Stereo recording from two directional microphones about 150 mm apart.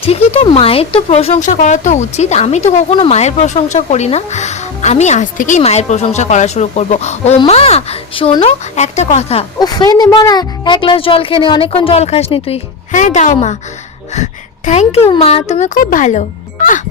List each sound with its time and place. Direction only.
0.0 s speech: 45° left (ahead or behind)
1.5 s speech: 55° left (ahead or behind)
9.6 s a woman's voice: 25° left (ahead or behind); by 16.2 s 55° left (ahead or behind)